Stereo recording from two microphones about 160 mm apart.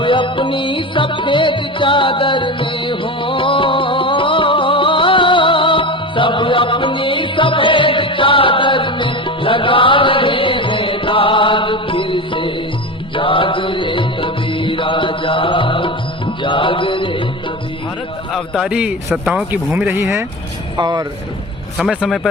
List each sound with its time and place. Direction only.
0.0 s music: 30° left (ahead or behind)
18.3 s a man's voice: centre (ahead or behind); by 21.0 s 25° right (ahead or behind)
21.8 s a man's voice: centre (ahead or behind)